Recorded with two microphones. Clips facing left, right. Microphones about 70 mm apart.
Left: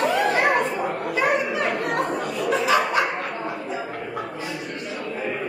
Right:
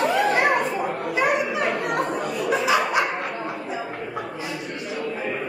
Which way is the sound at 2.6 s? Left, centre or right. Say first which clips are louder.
Left 1 dB; centre.